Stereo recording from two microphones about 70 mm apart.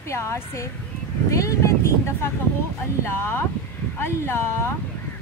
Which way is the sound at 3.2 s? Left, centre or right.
Left.